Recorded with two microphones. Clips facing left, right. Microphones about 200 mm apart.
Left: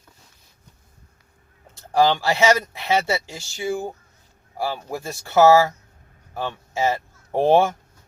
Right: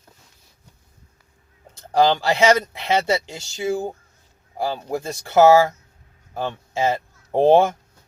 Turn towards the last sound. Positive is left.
turn(degrees=-20)  # may be behind; listen again after turning